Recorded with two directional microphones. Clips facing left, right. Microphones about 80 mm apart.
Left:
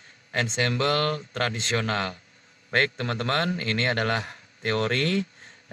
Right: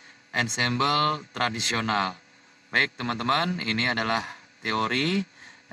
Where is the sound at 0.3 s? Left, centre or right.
Right.